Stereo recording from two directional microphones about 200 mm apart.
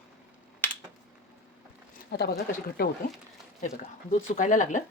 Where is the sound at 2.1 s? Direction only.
55° left (ahead or behind).